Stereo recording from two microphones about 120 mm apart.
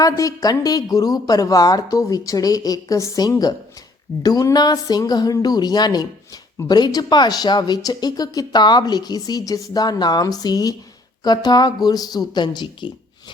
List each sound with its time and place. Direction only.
0.0 s a woman's voice: 30° left (ahead or behind)